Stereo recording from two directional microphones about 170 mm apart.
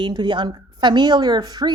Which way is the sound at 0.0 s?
25° right (ahead or behind).